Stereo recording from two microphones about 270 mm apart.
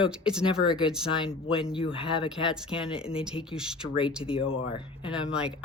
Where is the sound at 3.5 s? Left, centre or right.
Centre.